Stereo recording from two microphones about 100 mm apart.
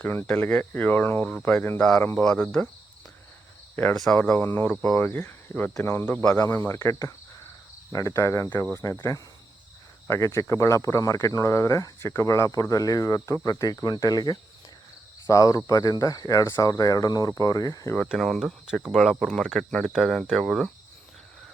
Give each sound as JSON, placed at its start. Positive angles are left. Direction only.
{"t": 0.0, "sound": "speech", "side_deg": 20}
{"t": 3.9, "sound": "speech", "side_deg": 0}
{"t": 4.2, "sound": "speech", "side_deg": 15}
{"t": 6.7, "sound": "speech", "side_deg": 35}
{"t": 9.0, "sound": "speech", "side_deg": 35}
{"t": 18.1, "sound": "speech", "side_deg": 0}